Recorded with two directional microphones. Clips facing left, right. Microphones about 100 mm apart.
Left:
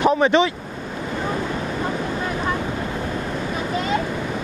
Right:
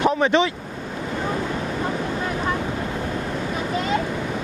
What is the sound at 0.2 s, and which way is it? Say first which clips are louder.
Speech: left 2 dB; 15° left (ahead or behind).